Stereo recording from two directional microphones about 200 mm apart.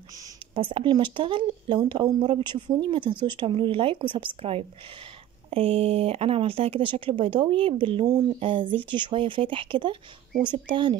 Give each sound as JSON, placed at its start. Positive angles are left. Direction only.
{"t": 0.1, "sound": "speech", "side_deg": -20}